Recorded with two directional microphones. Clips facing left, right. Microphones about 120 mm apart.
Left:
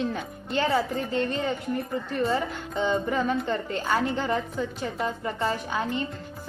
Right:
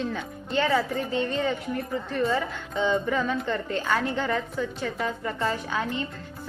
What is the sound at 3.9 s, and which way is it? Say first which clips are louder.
A woman's voice: left 2 dB; 5° left (ahead or behind).